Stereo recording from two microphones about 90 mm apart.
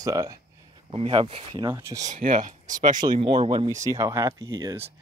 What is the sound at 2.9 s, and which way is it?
Speech, 55° right (ahead or behind).